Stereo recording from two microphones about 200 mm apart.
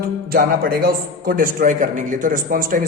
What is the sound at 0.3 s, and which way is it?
A man's voice, 50° right (ahead or behind).